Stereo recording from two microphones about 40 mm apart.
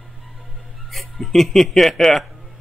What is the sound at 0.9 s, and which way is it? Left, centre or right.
Speech, centre.